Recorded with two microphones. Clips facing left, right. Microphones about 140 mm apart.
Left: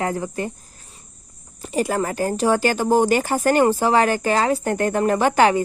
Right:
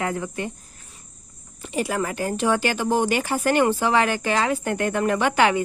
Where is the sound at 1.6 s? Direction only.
40° left (ahead or behind).